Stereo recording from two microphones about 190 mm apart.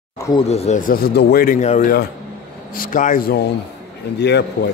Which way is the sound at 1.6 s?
40° left (ahead or behind).